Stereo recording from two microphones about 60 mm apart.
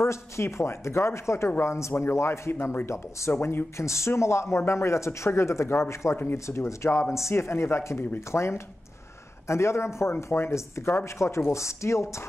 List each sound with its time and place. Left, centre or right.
0.0 s speech: left
2.5 s speech: left